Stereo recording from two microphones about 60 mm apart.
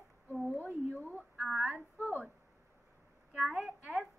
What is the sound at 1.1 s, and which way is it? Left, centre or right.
Speech, centre.